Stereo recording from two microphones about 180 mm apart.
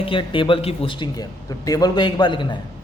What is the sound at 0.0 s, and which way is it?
A man's voice, 30° left (ahead or behind).